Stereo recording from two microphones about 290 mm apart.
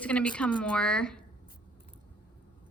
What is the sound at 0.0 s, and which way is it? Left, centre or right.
A woman's voice, centre.